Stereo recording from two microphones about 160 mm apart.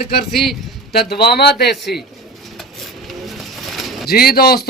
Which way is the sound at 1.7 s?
Centre (ahead or behind).